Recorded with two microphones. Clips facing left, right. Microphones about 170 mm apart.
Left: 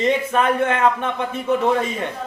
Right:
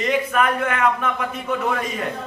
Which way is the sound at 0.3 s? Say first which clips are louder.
Left 2 dB; 25° left (ahead or behind).